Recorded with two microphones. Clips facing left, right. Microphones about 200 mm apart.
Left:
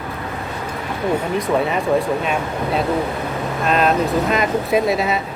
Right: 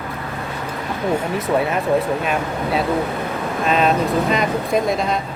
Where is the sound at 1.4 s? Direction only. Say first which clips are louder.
Even; centre (ahead or behind).